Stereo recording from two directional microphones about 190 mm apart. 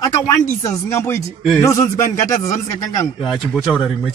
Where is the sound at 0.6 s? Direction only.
15° left (ahead or behind).